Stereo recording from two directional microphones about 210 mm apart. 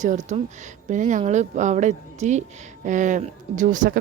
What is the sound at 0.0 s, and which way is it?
Speech, 35° right (ahead or behind).